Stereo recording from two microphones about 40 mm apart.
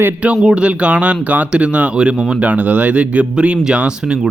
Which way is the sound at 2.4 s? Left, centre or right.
Right.